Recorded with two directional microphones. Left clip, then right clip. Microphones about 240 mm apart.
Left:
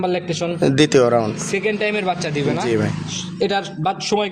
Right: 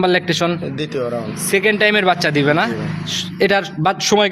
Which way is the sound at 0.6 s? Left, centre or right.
Left.